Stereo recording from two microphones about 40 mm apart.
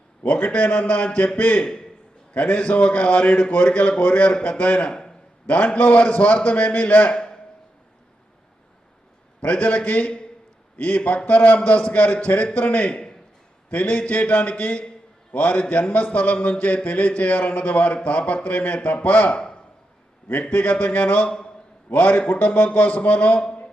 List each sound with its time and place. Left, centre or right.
0.2 s a man's voice: left
4.9 s a sound: left
5.5 s a man's voice: left
9.4 s a man's voice: left
21.2 s speech: left
21.9 s a man's voice: left